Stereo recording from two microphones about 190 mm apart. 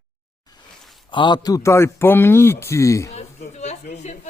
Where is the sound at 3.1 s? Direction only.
35° left (ahead or behind).